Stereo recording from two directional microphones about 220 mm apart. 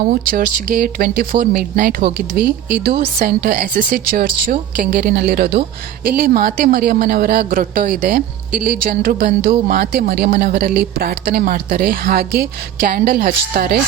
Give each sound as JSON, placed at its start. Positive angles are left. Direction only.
{"t": 0.1, "sound": "a man's voice", "side_deg": -40}